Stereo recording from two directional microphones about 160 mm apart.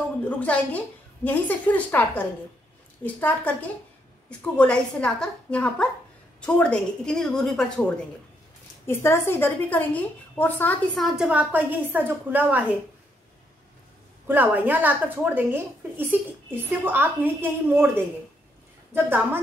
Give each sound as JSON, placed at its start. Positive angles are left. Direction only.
{"t": 0.4, "sound": "a woman's voice", "side_deg": 10}
{"t": 8.8, "sound": "a woman's voice", "side_deg": 15}
{"t": 11.0, "sound": "a woman's voice", "side_deg": -5}
{"t": 14.2, "sound": "a woman's voice", "side_deg": -10}